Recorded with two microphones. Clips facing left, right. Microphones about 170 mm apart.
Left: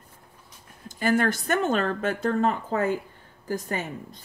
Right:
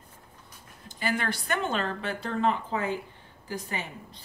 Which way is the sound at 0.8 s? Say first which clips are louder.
Left 7 dB; 45° left (ahead or behind).